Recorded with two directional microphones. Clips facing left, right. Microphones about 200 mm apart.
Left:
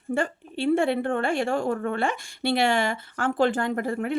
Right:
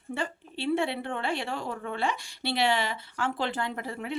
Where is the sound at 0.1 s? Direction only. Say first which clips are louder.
Left 7 dB; 50° left (ahead or behind).